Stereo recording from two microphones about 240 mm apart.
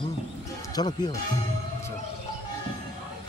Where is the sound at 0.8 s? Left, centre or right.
Centre.